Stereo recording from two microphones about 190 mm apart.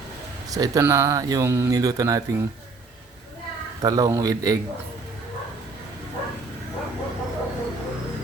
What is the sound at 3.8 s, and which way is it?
Speech, 20° right (ahead or behind).